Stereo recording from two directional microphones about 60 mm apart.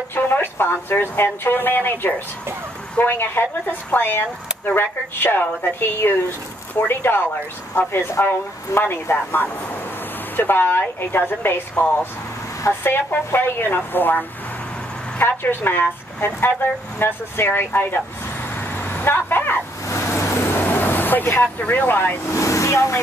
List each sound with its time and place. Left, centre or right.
0.1 s speech: left
12.8 s speech: left
19.9 s vehicle: left
22.3 s vehicle: left